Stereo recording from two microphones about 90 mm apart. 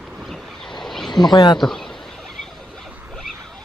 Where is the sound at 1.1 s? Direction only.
50° left (ahead or behind).